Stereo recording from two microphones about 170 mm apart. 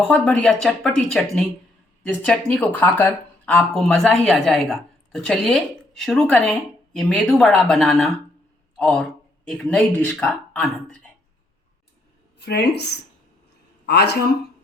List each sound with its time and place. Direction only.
0.0 s speech: 10° left (ahead or behind)
12.4 s speech: 75° left (ahead or behind)